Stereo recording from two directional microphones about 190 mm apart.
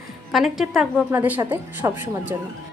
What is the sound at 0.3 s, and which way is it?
A woman's voice, centre (ahead or behind).